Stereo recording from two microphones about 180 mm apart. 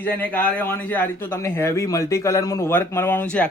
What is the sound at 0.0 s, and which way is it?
Speech, 10° left (ahead or behind).